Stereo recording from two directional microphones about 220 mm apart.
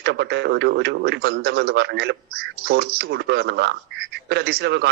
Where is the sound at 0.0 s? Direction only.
50° right (ahead or behind).